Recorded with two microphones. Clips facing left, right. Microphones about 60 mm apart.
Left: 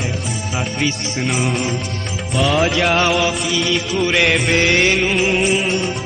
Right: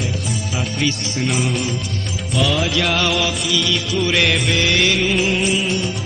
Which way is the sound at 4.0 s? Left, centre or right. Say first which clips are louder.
Left 2 dB; centre.